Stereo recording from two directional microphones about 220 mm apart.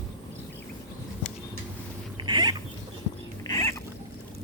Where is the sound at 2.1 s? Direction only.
20° right (ahead or behind).